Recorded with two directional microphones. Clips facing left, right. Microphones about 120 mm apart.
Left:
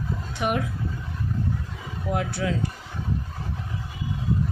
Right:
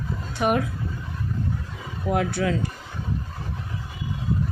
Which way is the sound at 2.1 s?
65° right (ahead or behind).